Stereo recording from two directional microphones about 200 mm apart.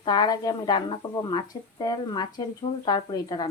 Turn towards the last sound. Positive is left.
turn(degrees=20)  # may be behind; listen again after turning